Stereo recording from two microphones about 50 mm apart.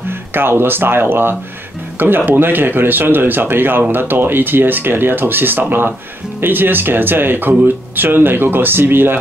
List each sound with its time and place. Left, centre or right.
0.3 s speech: right